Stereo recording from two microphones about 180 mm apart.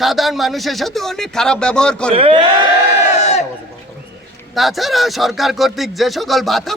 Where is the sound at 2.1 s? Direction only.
30° right (ahead or behind).